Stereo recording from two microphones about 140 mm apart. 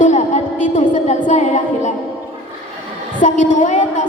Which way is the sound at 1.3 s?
60° left (ahead or behind).